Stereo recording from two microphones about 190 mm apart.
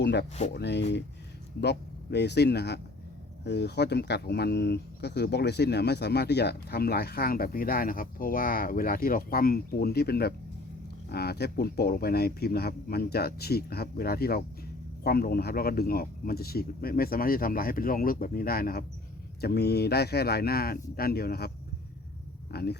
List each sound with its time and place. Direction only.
0.0 s speech: 65° left (ahead or behind)
22.5 s speech: 55° left (ahead or behind)